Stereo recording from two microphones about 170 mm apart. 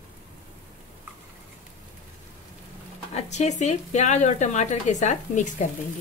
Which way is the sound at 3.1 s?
40° left (ahead or behind).